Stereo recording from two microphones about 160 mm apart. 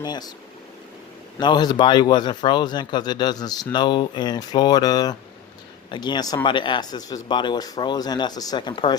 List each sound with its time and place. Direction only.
0.0 s speech: 25° left (ahead or behind)
1.4 s speech: 25° left (ahead or behind)